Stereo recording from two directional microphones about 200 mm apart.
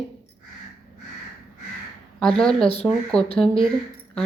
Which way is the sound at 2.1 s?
Centre (ahead or behind).